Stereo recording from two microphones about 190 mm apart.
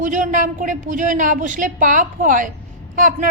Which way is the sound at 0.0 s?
40° right (ahead or behind).